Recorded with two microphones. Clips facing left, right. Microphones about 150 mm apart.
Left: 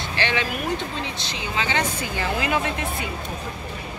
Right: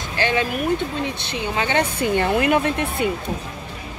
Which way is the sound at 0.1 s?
45° right (ahead or behind).